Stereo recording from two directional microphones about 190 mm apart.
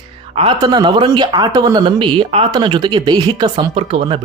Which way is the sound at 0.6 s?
20° right (ahead or behind).